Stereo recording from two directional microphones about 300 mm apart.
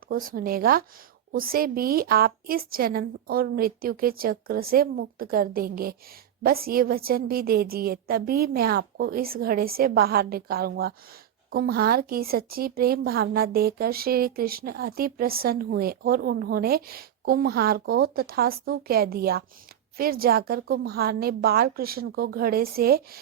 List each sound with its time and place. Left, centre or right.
0.1 s a woman's voice: right